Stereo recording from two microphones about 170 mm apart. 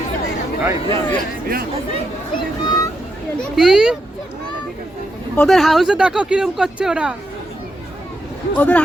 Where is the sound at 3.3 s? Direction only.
Centre (ahead or behind).